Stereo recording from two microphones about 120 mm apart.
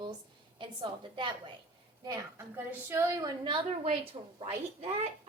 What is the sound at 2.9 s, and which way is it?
Speech, 20° right (ahead or behind).